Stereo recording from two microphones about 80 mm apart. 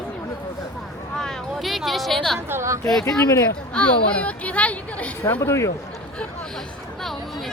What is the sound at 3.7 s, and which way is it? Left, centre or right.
A woman's voice, centre.